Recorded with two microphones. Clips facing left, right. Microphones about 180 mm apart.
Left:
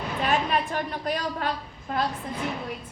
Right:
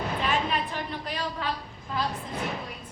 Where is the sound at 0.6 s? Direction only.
45° left (ahead or behind).